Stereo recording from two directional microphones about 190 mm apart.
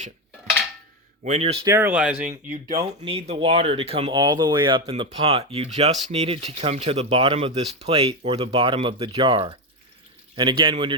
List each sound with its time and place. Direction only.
1.2 s speech: 35° right (ahead or behind)
1.6 s speech: 15° right (ahead or behind)
2.5 s speech: 45° right (ahead or behind)
3.0 s a man's voice: 30° right (ahead or behind)